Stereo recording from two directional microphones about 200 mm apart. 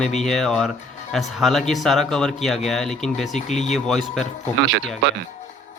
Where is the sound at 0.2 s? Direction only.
Centre (ahead or behind).